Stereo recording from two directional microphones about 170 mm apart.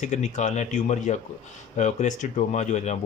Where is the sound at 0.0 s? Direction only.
45° left (ahead or behind).